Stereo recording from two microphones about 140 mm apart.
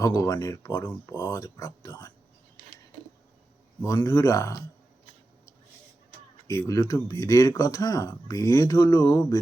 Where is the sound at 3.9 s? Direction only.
25° left (ahead or behind).